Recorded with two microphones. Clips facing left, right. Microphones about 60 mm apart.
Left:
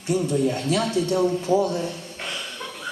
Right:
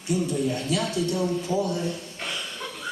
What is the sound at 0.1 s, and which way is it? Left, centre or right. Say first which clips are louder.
Speech: left 2 dB; left.